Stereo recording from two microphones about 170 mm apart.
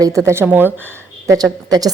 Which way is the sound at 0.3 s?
10° right (ahead or behind).